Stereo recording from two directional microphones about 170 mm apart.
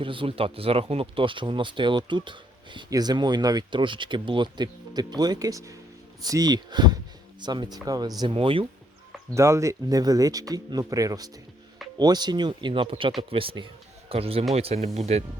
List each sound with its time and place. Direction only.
0.0 s speech: 30° right (ahead or behind)
9.3 s speech: 15° right (ahead or behind); by 15.2 s 40° right (ahead or behind)